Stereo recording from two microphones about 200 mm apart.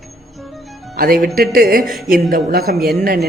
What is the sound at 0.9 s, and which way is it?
Speech, 50° right (ahead or behind).